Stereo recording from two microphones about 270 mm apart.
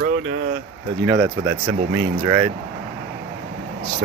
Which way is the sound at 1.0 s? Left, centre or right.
Centre.